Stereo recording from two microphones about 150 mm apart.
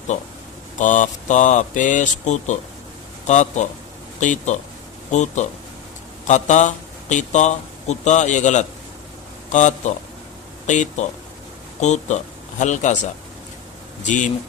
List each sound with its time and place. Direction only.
0.8 s speech: 55° left (ahead or behind)
14.0 s speech: 55° left (ahead or behind)